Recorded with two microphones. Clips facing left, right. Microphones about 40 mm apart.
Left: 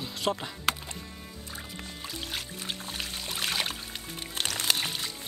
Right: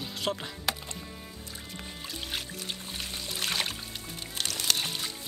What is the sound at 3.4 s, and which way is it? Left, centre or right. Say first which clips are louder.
Music: left 1 dB; centre.